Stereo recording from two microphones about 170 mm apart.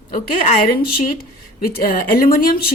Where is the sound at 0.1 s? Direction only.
50° left (ahead or behind).